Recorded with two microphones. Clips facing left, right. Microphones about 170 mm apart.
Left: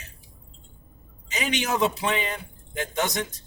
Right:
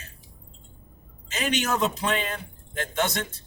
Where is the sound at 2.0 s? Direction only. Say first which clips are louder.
Even; 15° left (ahead or behind).